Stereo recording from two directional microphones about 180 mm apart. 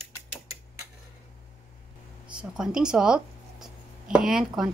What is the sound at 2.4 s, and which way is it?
Speech, 5° right (ahead or behind).